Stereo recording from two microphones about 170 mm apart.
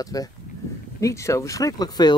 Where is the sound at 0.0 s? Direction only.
20° left (ahead or behind).